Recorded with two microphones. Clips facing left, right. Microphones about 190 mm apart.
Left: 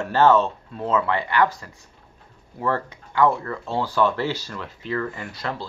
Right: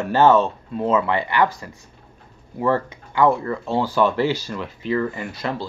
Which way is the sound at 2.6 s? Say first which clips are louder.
Right 4 dB; 15° right (ahead or behind).